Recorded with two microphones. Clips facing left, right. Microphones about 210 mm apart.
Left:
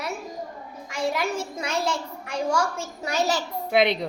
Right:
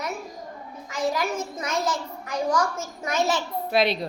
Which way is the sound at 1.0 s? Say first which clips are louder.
Even; 30° left (ahead or behind).